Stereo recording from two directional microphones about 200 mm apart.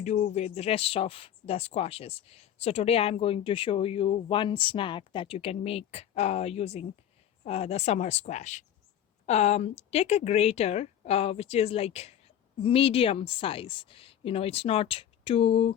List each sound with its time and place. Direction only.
0.0 s speech: 35° left (ahead or behind)